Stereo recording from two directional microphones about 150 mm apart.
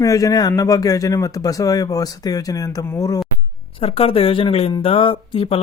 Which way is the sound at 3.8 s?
40° left (ahead or behind).